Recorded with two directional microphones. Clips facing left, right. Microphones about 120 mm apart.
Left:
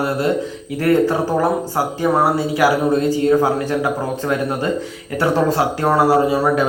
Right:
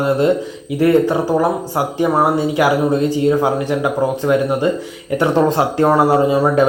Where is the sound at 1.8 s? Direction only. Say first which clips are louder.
Right 1 dB; 20° right (ahead or behind).